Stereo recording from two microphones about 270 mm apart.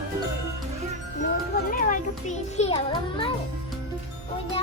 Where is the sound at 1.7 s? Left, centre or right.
Left.